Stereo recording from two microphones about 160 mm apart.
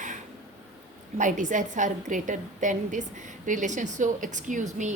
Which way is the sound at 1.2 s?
50° right (ahead or behind).